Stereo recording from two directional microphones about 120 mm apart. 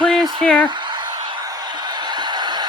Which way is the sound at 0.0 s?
5° left (ahead or behind).